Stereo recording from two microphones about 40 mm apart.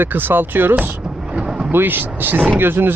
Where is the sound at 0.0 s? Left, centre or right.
Right.